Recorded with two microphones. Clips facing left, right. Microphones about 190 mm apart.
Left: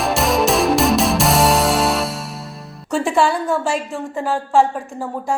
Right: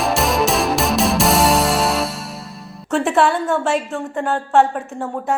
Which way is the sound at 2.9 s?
Centre (ahead or behind).